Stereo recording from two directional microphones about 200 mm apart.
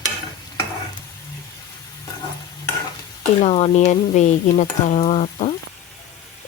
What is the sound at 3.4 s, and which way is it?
Speech, 30° left (ahead or behind).